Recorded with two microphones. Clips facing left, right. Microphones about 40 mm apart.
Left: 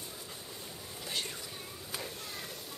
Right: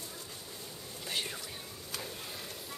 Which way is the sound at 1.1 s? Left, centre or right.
Centre.